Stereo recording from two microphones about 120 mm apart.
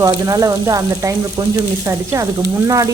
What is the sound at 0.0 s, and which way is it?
Speech, 30° right (ahead or behind).